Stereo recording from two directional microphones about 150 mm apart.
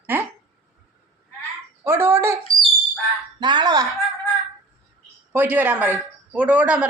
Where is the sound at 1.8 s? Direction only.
15° right (ahead or behind).